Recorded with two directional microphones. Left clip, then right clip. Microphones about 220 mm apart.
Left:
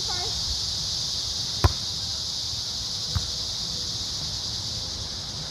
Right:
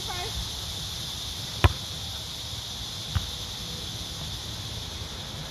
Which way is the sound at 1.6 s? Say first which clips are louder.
Right 2 dB; 5° right (ahead or behind).